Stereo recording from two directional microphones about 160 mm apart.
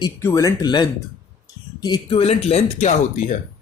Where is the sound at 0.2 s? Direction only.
15° left (ahead or behind); by 2.9 s 40° left (ahead or behind).